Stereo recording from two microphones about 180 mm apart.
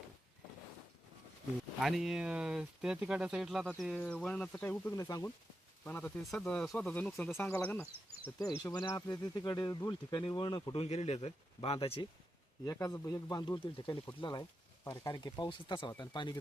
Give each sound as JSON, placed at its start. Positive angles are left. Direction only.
{"t": 1.8, "sound": "speech", "side_deg": 0}
{"t": 8.6, "sound": "speech", "side_deg": 20}
{"t": 10.8, "sound": "speech", "side_deg": 40}
{"t": 12.6, "sound": "speech", "side_deg": 20}